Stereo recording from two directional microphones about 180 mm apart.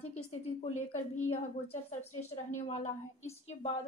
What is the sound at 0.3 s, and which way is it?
Speech, 40° left (ahead or behind).